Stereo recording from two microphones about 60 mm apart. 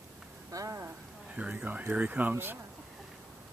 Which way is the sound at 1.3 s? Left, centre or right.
Right.